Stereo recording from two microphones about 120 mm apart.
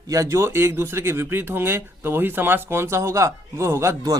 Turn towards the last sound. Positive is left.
turn(degrees=-25)  # may be behind; listen again after turning